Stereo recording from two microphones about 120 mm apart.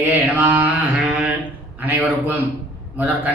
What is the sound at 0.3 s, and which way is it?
Mantra, 15° right (ahead or behind).